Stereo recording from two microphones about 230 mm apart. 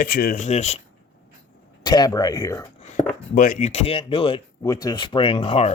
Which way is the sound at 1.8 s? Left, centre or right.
Centre.